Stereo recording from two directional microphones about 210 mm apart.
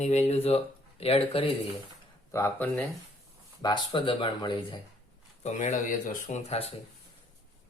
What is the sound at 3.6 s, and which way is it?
Speech, 25° left (ahead or behind).